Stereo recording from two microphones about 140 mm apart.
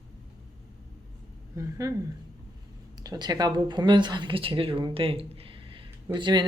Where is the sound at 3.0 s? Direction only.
30° right (ahead or behind).